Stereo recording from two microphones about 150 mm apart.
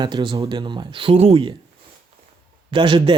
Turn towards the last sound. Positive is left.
turn(degrees=-30)  # may be behind; listen again after turning